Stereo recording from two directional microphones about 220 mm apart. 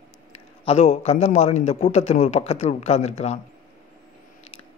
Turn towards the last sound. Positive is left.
turn(degrees=30)  # may be behind; listen again after turning